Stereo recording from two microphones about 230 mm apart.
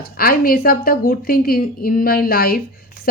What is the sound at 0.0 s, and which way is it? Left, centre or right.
A woman's voice, left.